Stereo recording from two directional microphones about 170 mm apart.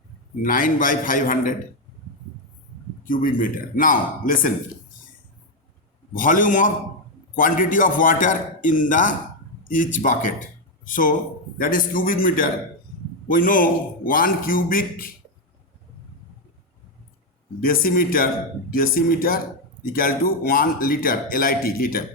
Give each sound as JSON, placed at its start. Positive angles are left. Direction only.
{"t": 0.4, "sound": "a man's voice", "side_deg": 55}
{"t": 3.0, "sound": "a man's voice", "side_deg": 55}
{"t": 6.1, "sound": "a man's voice", "side_deg": 50}
{"t": 17.6, "sound": "speech", "side_deg": 55}